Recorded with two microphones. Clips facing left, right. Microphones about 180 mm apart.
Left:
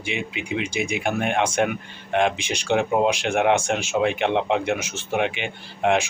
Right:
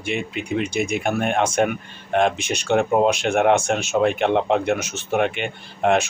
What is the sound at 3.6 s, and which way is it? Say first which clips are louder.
Speech: right 2 dB; 10° left (ahead or behind).